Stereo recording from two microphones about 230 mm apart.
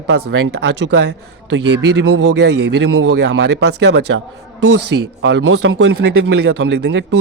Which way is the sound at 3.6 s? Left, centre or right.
Right.